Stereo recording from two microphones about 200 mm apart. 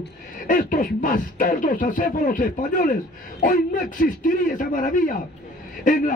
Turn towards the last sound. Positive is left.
turn(degrees=40)  # may be behind; listen again after turning